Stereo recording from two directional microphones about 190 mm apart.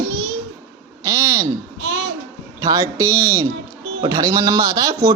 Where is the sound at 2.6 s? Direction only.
20° right (ahead or behind).